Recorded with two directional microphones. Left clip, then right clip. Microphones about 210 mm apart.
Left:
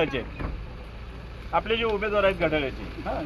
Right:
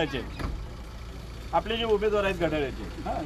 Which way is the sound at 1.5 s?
20° left (ahead or behind).